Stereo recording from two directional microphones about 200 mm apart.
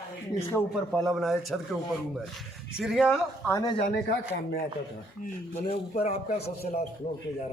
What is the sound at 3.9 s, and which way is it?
Speech, 50° left (ahead or behind).